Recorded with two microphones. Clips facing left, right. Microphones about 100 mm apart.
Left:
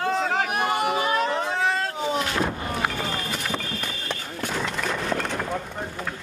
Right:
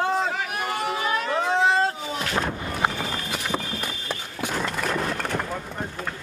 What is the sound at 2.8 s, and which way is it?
Run, 25° right (ahead or behind).